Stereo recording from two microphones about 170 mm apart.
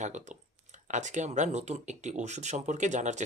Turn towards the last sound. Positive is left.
turn(degrees=-45)  # may be behind; listen again after turning